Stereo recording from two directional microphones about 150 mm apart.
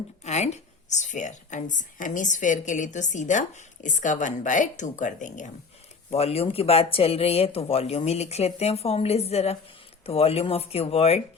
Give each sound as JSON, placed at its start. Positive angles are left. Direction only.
{"t": 0.3, "sound": "a woman's voice", "side_deg": 50}
{"t": 6.1, "sound": "speech", "side_deg": 40}